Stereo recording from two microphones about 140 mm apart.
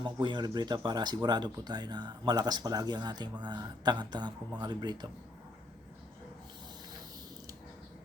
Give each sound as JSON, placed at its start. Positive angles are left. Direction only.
{"t": 0.0, "sound": "speech", "side_deg": -35}